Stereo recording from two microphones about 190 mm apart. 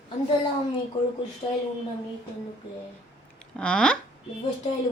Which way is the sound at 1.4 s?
25° left (ahead or behind).